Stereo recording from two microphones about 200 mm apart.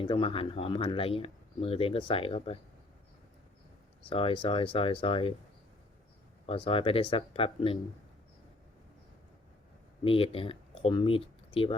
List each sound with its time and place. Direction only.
0.0 s speech: 25° left (ahead or behind)
4.1 s speech: 25° left (ahead or behind)
6.4 s speech: 25° left (ahead or behind)
10.0 s speech: 25° left (ahead or behind)